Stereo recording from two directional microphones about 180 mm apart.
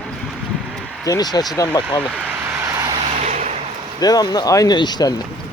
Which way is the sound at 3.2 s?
40° right (ahead or behind).